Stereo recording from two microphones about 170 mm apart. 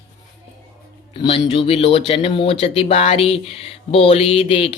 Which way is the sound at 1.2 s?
30° left (ahead or behind).